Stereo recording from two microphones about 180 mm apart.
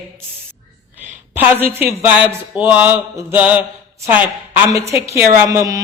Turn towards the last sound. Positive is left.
turn(degrees=-20)  # may be behind; listen again after turning